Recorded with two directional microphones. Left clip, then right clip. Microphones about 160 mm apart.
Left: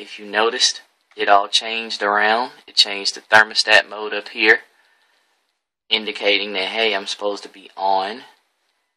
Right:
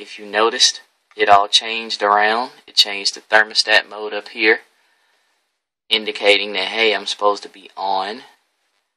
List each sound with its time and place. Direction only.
0.1 s speech: 30° right (ahead or behind)
5.9 s speech: 35° right (ahead or behind)